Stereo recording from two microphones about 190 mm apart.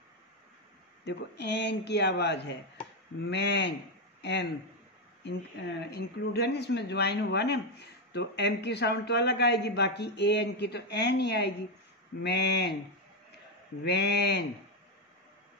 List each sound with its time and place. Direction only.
1.0 s speech: 65° left (ahead or behind)
5.9 s speech: 60° left (ahead or behind)
13.8 s speech: 60° left (ahead or behind)